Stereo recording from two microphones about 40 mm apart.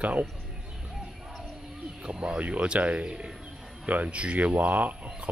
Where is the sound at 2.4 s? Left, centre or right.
Right.